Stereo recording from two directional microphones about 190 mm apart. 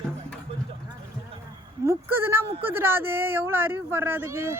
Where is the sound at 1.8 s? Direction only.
10° right (ahead or behind).